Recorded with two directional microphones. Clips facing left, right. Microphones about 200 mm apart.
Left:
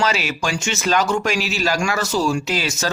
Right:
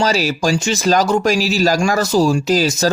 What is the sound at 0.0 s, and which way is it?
Speech, 40° right (ahead or behind).